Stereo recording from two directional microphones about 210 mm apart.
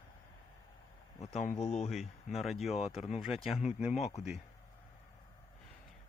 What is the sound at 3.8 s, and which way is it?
Speech, 5° right (ahead or behind).